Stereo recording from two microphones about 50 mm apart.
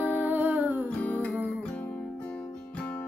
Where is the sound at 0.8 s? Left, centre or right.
Left.